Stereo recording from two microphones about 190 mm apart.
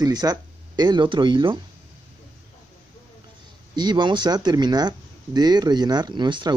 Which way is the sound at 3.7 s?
25° right (ahead or behind).